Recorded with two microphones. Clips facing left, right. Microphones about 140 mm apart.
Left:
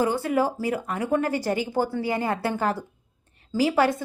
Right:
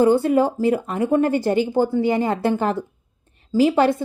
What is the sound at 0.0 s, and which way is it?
A woman's voice, 30° right (ahead or behind).